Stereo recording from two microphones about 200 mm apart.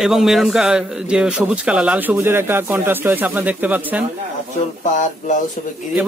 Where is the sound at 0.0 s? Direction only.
Centre (ahead or behind).